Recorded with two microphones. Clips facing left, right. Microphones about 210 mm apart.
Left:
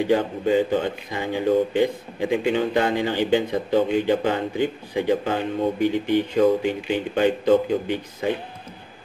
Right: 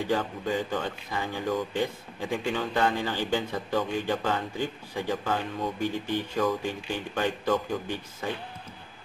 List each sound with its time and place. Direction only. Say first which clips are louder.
0.0 s a man's voice: left 8 dB; 20° left (ahead or behind)